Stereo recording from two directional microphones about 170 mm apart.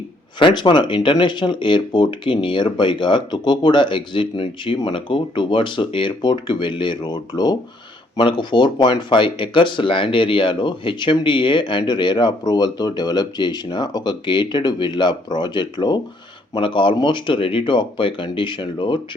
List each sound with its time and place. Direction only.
0.3 s speech: 30° left (ahead or behind)